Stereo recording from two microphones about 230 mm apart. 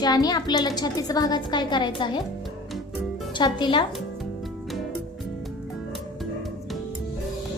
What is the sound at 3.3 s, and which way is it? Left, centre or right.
Speech, centre.